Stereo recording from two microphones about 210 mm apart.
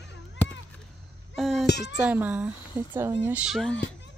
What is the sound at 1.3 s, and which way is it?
Music, centre (ahead or behind).